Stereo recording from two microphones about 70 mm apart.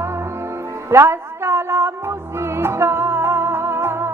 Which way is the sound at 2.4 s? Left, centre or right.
Right.